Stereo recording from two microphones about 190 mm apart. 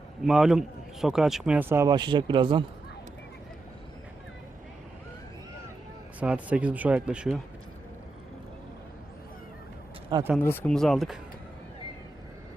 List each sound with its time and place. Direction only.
0.2 s speech: centre (ahead or behind); by 2.6 s 25° right (ahead or behind)
6.1 s speech: 5° right (ahead or behind)
10.3 s speech: 10° left (ahead or behind)